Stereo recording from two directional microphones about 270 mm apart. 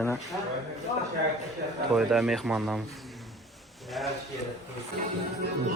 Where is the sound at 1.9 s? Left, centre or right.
Centre.